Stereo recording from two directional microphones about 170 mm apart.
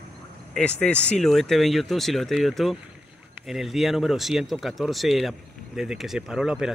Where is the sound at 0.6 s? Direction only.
5° left (ahead or behind).